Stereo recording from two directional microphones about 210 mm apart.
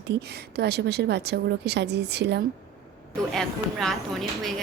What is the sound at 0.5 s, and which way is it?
A woman's voice, 50° right (ahead or behind).